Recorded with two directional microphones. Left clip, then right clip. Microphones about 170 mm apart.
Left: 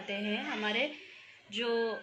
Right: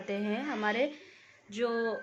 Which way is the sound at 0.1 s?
90° right.